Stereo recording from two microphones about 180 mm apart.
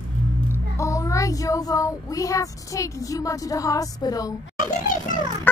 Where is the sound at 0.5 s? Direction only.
15° left (ahead or behind).